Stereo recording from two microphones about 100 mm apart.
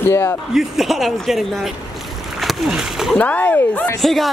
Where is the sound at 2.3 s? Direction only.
Centre (ahead or behind).